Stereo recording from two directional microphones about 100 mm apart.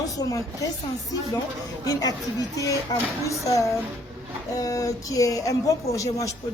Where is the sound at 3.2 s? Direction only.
30° left (ahead or behind).